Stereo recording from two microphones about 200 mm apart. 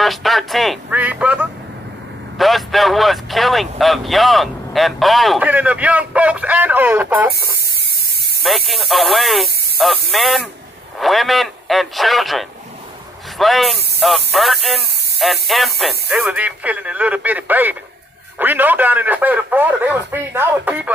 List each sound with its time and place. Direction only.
0.0 s a man's voice: centre (ahead or behind)
7.3 s spray: 50° right (ahead or behind)
8.4 s a man's voice: centre (ahead or behind)